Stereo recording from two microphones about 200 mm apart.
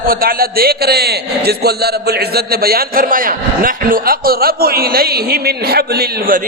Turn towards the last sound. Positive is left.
turn(degrees=-45)  # may be behind; listen again after turning